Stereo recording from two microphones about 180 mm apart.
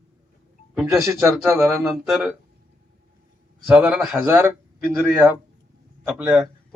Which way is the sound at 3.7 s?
5° right (ahead or behind).